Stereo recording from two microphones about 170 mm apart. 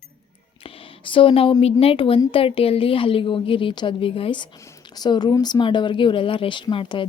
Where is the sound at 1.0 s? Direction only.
30° left (ahead or behind).